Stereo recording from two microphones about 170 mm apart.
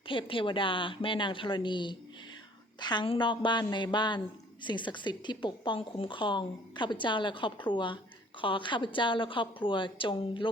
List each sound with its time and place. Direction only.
0.1 s a woman's voice: 30° left (ahead or behind)